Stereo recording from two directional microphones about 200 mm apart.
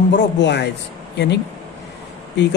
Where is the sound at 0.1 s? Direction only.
60° left (ahead or behind).